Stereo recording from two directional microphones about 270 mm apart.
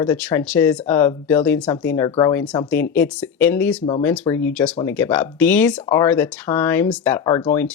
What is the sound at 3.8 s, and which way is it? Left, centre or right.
Speech, centre.